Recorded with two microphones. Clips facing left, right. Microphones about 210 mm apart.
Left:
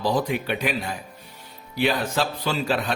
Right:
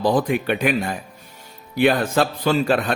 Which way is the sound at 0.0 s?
50° right (ahead or behind).